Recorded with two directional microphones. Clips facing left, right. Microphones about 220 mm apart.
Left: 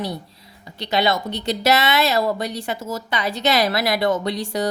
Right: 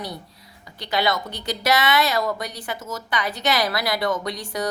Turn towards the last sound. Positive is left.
turn(degrees=25)  # may be behind; listen again after turning